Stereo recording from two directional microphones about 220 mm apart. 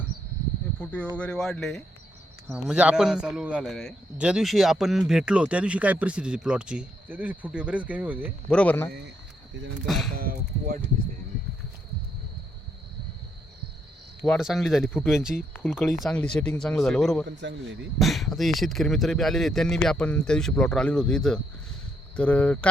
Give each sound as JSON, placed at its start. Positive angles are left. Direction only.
{"t": 0.8, "sound": "a man's voice", "side_deg": 5}
{"t": 8.4, "sound": "a man's voice", "side_deg": 5}
{"t": 10.2, "sound": "speech", "side_deg": -40}
{"t": 14.3, "sound": "a man's voice", "side_deg": 0}
{"t": 17.2, "sound": "a man's voice", "side_deg": -50}
{"t": 18.0, "sound": "a man's voice", "side_deg": 0}